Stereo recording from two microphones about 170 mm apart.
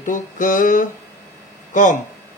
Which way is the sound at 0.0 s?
50° left (ahead or behind).